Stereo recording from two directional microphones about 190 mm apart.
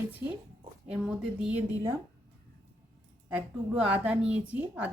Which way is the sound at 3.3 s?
10° right (ahead or behind).